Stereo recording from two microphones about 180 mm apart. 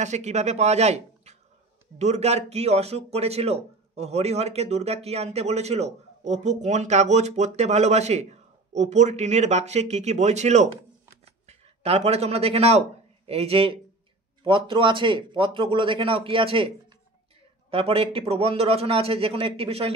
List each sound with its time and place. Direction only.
0.0 s a man's voice: 40° right (ahead or behind)